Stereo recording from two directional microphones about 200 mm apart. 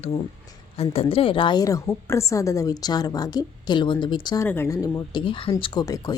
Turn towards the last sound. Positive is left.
turn(degrees=20)  # may be behind; listen again after turning